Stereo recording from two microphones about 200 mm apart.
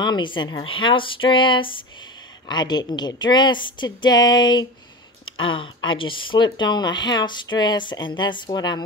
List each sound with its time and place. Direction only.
0.0 s a woman's voice: 25° left (ahead or behind)